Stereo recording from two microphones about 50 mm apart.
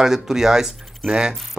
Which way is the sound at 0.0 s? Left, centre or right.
Centre.